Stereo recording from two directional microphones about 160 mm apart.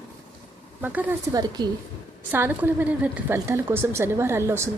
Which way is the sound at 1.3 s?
25° right (ahead or behind).